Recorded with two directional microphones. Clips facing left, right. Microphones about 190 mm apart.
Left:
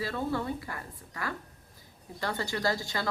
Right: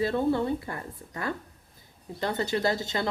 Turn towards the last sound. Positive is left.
turn(degrees=-20)  # may be behind; listen again after turning